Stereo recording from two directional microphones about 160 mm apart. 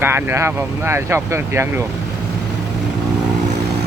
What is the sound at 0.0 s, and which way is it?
Speech, 15° right (ahead or behind).